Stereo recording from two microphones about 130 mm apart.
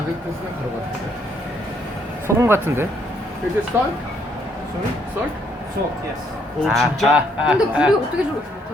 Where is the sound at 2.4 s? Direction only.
15° right (ahead or behind).